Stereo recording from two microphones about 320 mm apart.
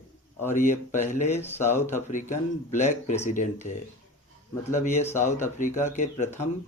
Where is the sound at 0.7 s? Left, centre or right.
Left.